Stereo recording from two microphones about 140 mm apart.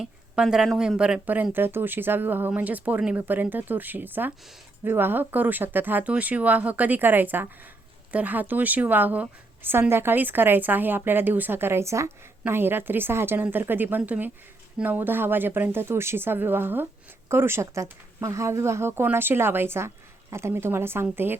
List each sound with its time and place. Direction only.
0.0 s a woman's voice: 5° right (ahead or behind)